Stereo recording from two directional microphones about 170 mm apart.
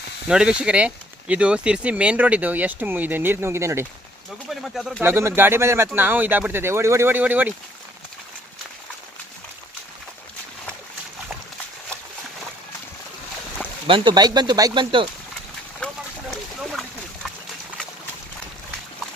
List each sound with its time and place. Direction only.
0.3 s speech: 5° right (ahead or behind)
4.4 s speech: centre (ahead or behind)
5.0 s speech: 15° right (ahead or behind)
13.8 s speech: 30° right (ahead or behind)
16.3 s a sound: centre (ahead or behind)